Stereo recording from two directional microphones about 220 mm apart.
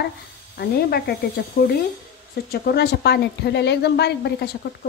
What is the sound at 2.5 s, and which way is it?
A woman's voice, 45° left (ahead or behind).